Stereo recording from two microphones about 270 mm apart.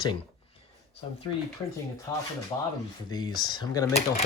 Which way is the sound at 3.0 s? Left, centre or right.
Centre.